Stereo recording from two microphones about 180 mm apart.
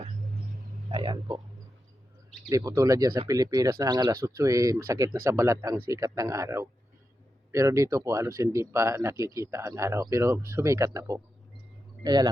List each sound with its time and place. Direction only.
0.9 s speech: 25° right (ahead or behind)
2.5 s speech: 20° right (ahead or behind)